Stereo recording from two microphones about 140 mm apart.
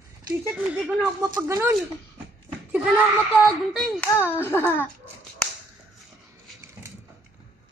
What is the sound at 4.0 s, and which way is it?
Speech, 15° left (ahead or behind).